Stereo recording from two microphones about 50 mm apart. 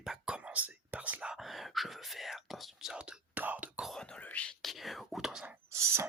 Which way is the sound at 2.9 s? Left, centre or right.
Centre.